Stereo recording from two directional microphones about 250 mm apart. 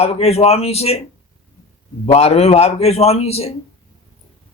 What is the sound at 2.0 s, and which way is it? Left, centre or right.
A man's voice, left.